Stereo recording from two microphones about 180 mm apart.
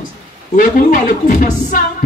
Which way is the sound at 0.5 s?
45° left (ahead or behind).